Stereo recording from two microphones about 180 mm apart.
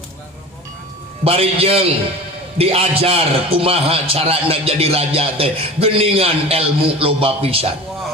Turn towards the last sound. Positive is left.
turn(degrees=-30)  # may be behind; listen again after turning